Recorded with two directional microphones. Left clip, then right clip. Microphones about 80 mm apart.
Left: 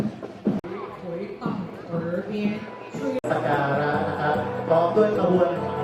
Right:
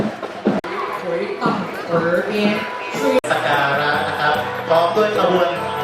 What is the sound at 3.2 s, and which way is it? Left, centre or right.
Music, right.